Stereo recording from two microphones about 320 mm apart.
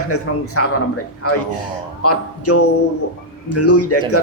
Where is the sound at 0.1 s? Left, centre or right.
Left.